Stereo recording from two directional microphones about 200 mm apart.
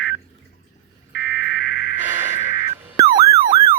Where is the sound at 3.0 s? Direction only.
15° right (ahead or behind).